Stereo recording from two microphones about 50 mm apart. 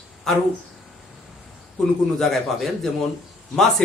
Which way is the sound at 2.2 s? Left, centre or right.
Centre.